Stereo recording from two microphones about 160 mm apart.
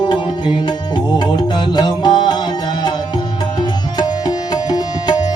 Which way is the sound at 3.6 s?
25° left (ahead or behind).